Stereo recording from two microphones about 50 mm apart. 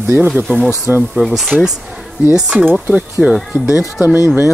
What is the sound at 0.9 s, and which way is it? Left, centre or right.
Speech, right.